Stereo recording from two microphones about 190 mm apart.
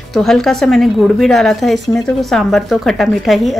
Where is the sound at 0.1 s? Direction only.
Centre (ahead or behind).